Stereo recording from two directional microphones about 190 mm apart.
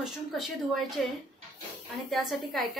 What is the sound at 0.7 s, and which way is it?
Speech, centre (ahead or behind).